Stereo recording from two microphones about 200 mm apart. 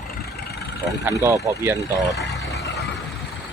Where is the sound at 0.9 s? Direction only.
15° right (ahead or behind).